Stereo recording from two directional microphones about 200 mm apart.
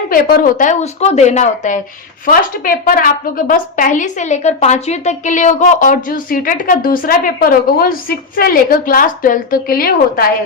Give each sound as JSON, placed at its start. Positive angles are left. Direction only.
{"t": 0.1, "sound": "a woman's voice", "side_deg": 45}